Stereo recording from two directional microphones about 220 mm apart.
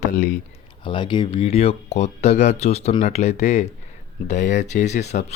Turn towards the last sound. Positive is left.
turn(degrees=30)  # may be behind; listen again after turning